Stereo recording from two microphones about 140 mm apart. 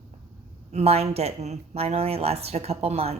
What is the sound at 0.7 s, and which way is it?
Speech, 50° right (ahead or behind).